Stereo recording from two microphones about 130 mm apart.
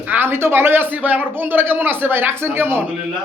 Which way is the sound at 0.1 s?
15° right (ahead or behind).